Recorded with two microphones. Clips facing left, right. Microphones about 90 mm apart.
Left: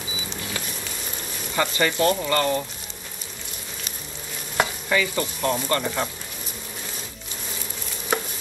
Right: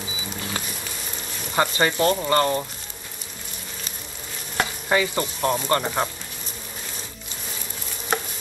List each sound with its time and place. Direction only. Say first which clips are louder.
1.5 s speech: right 2 dB; 30° right (ahead or behind)
4.8 s frying: right 1 dB; 30° right (ahead or behind)